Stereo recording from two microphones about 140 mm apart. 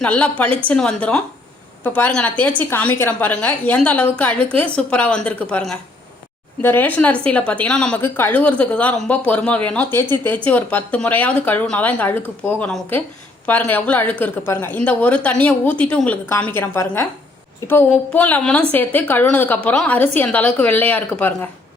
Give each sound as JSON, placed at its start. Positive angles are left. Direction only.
{"t": 0.0, "sound": "speech", "side_deg": 10}
{"t": 8.0, "sound": "speech", "side_deg": 15}